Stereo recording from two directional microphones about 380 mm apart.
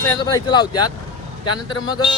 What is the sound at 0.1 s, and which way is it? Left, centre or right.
Speech, centre.